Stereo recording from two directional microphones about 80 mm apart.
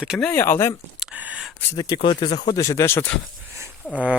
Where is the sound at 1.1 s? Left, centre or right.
Centre.